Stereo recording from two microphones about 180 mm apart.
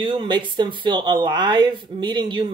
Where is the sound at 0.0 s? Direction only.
25° right (ahead or behind).